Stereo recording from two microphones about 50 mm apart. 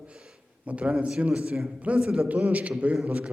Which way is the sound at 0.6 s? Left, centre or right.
Right.